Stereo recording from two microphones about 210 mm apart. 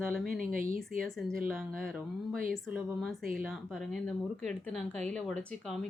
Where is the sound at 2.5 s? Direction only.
5° right (ahead or behind).